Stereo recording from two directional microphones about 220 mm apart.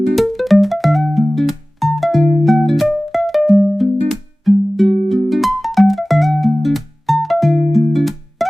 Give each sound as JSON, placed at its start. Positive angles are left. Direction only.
{"t": 0.0, "sound": "music", "side_deg": 0}